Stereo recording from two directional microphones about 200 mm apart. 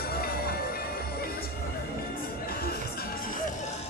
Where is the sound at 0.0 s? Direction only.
50° left (ahead or behind).